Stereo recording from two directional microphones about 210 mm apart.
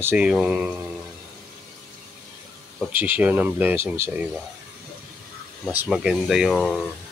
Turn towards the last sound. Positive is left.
turn(degrees=0)  # may be behind; listen again after turning